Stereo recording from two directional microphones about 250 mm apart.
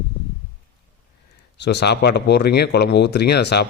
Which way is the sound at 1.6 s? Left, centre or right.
Left.